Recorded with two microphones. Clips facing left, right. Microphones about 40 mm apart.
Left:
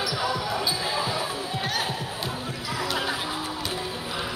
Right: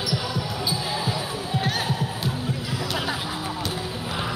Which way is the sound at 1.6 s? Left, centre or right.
Centre.